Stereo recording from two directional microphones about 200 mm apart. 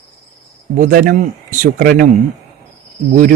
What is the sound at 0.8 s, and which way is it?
Speech, 45° right (ahead or behind).